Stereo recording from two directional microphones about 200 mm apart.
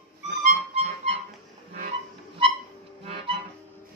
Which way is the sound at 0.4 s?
35° right (ahead or behind).